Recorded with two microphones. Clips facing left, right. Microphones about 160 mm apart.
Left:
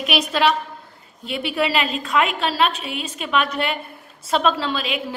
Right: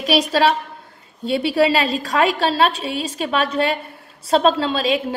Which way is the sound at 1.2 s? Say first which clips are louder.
Right 6 dB; 30° right (ahead or behind).